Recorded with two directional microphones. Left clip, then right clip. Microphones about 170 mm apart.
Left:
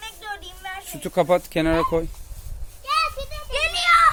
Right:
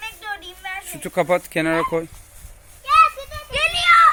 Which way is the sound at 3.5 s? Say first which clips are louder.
Right 3 dB; 10° left (ahead or behind).